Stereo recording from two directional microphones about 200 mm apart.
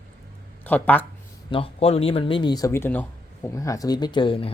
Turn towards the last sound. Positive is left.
turn(degrees=25)  # may be behind; listen again after turning